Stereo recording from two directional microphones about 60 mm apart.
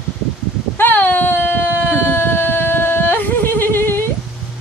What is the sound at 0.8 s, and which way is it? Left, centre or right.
Whimper, left.